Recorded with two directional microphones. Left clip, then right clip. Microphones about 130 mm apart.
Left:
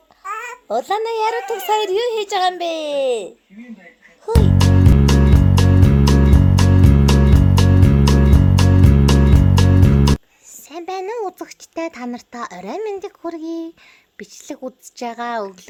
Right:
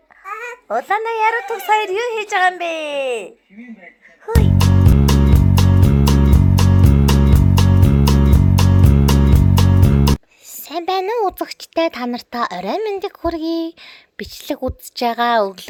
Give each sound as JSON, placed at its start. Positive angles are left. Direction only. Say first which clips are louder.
{"t": 0.3, "sound": "babbling", "louder": "left 1 dB", "side_deg": 20}
{"t": 0.9, "sound": "a woman's voice", "louder": "right 4 dB", "side_deg": 40}
{"t": 1.4, "sound": "speech", "louder": "right 1 dB", "side_deg": 20}
{"t": 2.0, "sound": "a woman's voice", "louder": "right 1 dB", "side_deg": 40}
{"t": 4.3, "sound": "music", "louder": "left 1 dB", "side_deg": 0}
{"t": 10.7, "sound": "speech", "louder": "right 6 dB", "side_deg": -25}